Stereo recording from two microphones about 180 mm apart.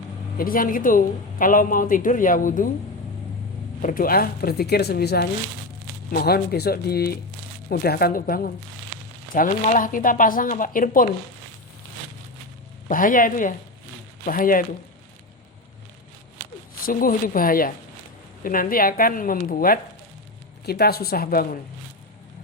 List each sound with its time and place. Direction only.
0.3 s a woman's voice: 50° left (ahead or behind)
3.8 s a woman's voice: 50° left (ahead or behind)
12.9 s a woman's voice: 50° left (ahead or behind)
16.8 s a woman's voice: 50° left (ahead or behind)